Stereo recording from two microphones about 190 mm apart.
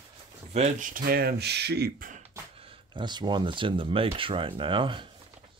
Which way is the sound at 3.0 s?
25° right (ahead or behind).